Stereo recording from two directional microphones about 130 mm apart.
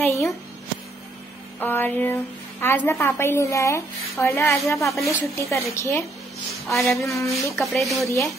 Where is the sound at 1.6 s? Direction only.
15° left (ahead or behind).